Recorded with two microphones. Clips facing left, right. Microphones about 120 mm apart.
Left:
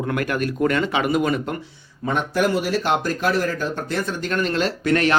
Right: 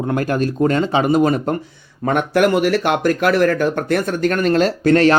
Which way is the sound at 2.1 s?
65° right (ahead or behind).